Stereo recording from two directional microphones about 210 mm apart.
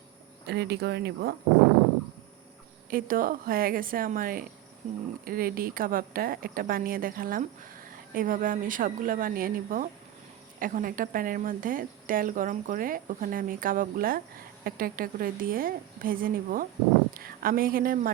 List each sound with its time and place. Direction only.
0.4 s a woman's voice: 50° right (ahead or behind)
2.9 s a woman's voice: 40° right (ahead or behind)